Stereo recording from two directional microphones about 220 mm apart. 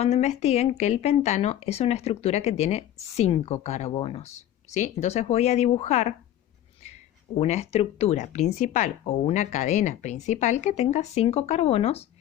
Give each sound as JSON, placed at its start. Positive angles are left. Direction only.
{"t": 0.0, "sound": "speech", "side_deg": 30}
{"t": 7.3, "sound": "a woman's voice", "side_deg": 30}